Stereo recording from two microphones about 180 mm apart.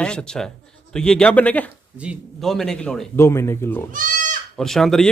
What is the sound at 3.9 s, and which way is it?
Goat, 45° right (ahead or behind).